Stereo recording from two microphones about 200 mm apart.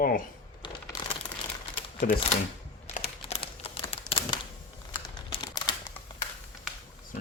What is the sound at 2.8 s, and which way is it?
Crumpling, 30° left (ahead or behind).